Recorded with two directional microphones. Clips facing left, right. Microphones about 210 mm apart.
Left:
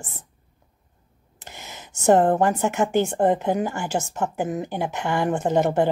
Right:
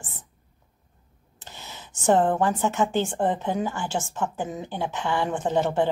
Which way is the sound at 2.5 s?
10° left (ahead or behind).